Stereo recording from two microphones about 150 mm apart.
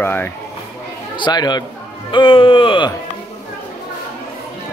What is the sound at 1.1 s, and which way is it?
Speech, 30° left (ahead or behind).